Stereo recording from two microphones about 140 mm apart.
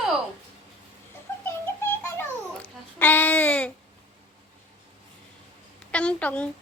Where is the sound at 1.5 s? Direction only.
15° left (ahead or behind).